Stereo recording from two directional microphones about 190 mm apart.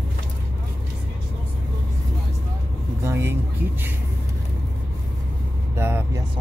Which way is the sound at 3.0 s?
15° right (ahead or behind).